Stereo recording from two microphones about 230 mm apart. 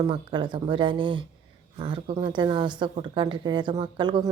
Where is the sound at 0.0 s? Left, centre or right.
Centre.